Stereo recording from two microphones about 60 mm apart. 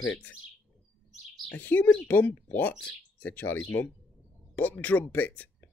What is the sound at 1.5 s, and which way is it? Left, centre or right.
Speech, left.